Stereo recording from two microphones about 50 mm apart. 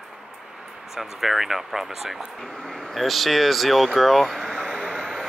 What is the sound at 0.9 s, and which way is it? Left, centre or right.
Speech, centre.